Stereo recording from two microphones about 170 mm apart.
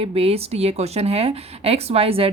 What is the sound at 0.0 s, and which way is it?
Speech, 35° right (ahead or behind).